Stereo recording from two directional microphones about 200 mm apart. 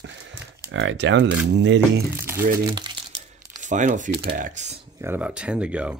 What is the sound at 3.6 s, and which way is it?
Speech, 40° right (ahead or behind).